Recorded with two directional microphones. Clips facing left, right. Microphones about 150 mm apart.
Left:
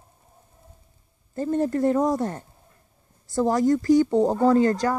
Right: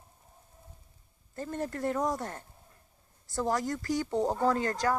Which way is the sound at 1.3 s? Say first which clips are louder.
Left 12 dB; 15° left (ahead or behind).